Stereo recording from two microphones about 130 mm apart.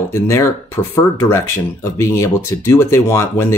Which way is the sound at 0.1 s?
20° left (ahead or behind).